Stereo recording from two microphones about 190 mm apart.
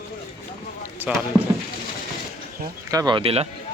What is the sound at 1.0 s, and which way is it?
Speech, 10° right (ahead or behind).